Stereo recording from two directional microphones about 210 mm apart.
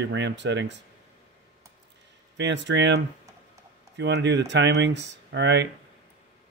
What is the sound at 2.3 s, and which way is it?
Speech, 55° right (ahead or behind).